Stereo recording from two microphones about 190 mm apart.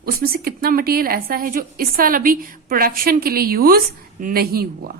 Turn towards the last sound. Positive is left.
turn(degrees=-50)  # may be behind; listen again after turning